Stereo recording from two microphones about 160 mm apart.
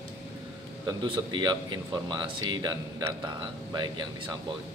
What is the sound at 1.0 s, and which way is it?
Speech, 30° right (ahead or behind).